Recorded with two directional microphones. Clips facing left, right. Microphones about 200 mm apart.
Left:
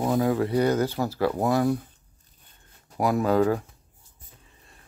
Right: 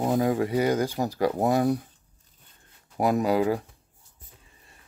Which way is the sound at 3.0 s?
20° right (ahead or behind).